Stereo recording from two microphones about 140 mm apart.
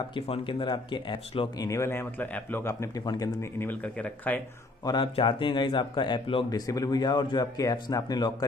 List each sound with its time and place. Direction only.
0.1 s speech: 35° left (ahead or behind)
1.7 s speech: 20° left (ahead or behind)
4.8 s speech: 35° left (ahead or behind)